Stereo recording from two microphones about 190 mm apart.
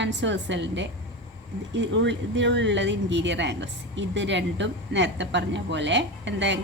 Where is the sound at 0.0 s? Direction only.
70° right (ahead or behind).